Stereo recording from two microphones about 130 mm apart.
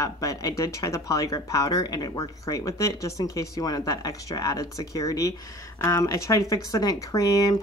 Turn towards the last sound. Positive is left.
turn(degrees=25)  # may be behind; listen again after turning